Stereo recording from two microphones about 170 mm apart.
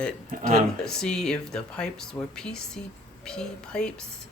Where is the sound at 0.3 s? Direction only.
55° right (ahead or behind).